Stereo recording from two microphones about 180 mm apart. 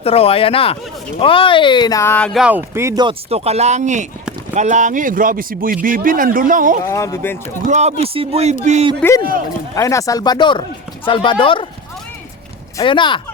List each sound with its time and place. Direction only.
0.0 s speech: 35° left (ahead or behind); by 2.4 s 5° left (ahead or behind)
2.4 s speech: 10° right (ahead or behind); by 6.7 s 50° right (ahead or behind)
6.9 s speech: 15° left (ahead or behind)
7.7 s speech: 40° right (ahead or behind)
9.0 s speech: 15° left (ahead or behind)
12.7 s speech: 25° left (ahead or behind)